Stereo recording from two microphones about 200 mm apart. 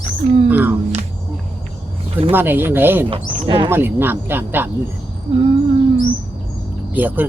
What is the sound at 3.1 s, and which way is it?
Speech, 25° right (ahead or behind).